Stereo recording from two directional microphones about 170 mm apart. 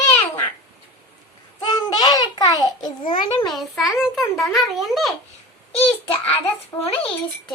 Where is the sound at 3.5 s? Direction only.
Centre (ahead or behind).